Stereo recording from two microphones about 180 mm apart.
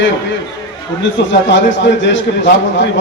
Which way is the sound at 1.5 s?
85° left.